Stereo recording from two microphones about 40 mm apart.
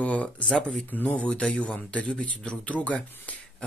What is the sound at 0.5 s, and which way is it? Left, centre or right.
Speech, left.